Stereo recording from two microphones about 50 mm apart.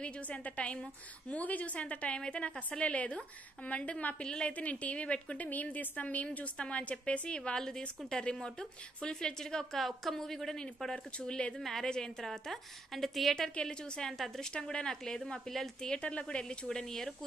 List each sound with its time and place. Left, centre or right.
0.0 s a woman's voice: left
5.5 s a woman's voice: left; by 13.5 s centre
13.6 s a woman's voice: centre
14.1 s a woman's voice: centre
14.5 s a woman's voice: centre
15.9 s a woman's voice: left